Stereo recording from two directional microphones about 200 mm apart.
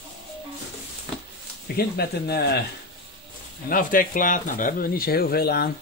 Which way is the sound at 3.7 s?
45° left (ahead or behind).